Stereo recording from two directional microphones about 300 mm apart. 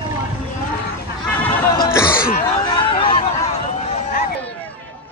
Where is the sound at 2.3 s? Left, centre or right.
Centre.